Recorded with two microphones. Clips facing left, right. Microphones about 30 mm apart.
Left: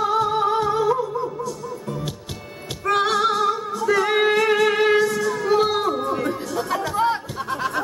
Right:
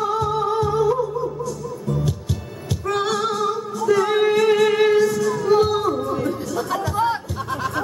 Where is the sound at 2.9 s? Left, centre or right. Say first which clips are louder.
Left 3 dB; left.